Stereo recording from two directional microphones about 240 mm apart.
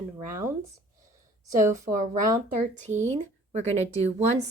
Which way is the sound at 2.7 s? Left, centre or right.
Right.